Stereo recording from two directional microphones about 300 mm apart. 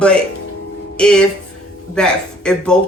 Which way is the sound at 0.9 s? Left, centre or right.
Centre.